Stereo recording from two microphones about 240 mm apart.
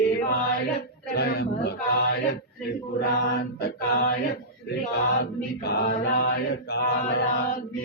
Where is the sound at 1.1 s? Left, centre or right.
Left.